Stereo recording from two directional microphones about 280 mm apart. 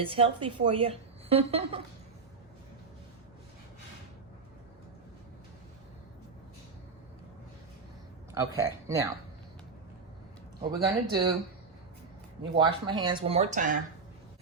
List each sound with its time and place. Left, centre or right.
0.0 s a woman's voice: centre
8.3 s speech: centre
10.7 s speech: centre
12.5 s a woman's voice: centre